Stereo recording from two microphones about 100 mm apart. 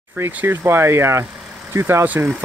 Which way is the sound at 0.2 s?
20° right (ahead or behind).